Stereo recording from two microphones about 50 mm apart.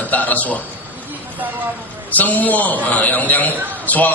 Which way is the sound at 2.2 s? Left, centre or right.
Left.